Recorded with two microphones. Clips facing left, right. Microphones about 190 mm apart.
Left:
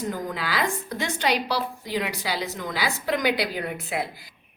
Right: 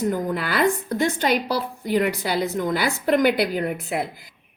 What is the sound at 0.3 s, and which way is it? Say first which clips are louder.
A woman's voice: right 6 dB; 55° right (ahead or behind).